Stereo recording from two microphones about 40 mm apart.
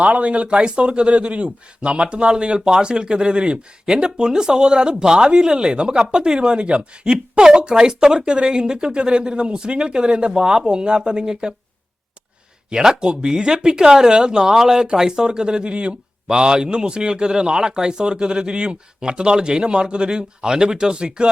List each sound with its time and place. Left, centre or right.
0.0 s speech: right; by 11.5 s centre
12.7 s speech: centre